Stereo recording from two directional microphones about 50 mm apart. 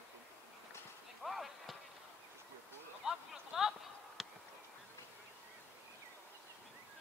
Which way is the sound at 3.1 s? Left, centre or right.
Centre.